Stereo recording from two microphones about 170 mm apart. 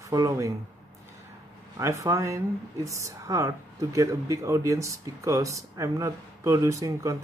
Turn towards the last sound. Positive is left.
turn(degrees=-20)  # may be behind; listen again after turning